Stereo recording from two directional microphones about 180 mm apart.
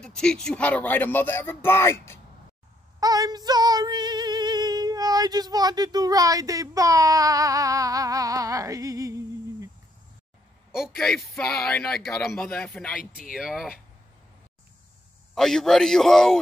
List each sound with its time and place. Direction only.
0.0 s speech: 5° left (ahead or behind)
3.0 s female singing: 20° right (ahead or behind)
10.7 s speech: centre (ahead or behind)
15.3 s speech: centre (ahead or behind)